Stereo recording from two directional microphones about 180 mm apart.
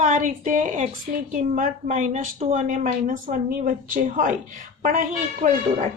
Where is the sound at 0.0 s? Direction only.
45° right (ahead or behind).